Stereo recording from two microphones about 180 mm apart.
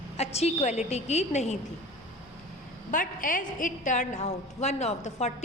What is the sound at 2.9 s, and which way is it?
A woman's voice, 50° left (ahead or behind).